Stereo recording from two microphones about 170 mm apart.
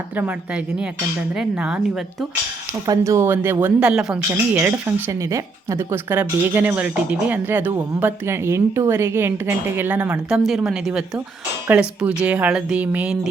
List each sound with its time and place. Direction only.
0.2 s speech: 10° right (ahead or behind)
2.8 s speech: 20° right (ahead or behind)